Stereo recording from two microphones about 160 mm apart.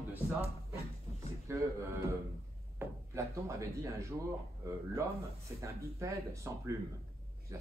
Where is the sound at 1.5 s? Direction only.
15° right (ahead or behind).